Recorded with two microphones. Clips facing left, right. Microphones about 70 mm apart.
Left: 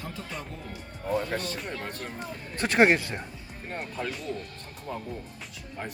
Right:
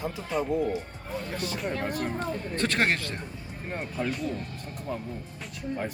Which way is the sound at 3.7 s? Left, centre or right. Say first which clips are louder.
Right 3 dB; centre.